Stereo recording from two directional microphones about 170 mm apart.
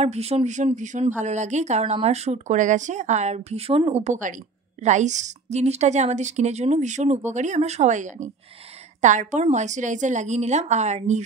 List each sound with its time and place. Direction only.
0.0 s a woman's voice: 40° right (ahead or behind)